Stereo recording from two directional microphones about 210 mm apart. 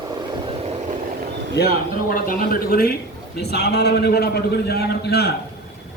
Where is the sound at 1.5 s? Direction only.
50° left (ahead or behind).